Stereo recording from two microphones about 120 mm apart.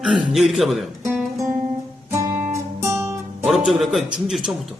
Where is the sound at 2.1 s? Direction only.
25° right (ahead or behind).